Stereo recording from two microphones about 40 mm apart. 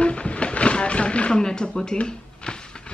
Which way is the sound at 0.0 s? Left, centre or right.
Left.